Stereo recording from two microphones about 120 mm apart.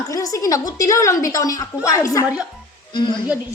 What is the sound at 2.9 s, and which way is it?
Speech, 40° left (ahead or behind).